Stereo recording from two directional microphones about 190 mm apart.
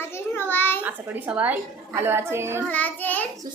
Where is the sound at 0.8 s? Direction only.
10° right (ahead or behind).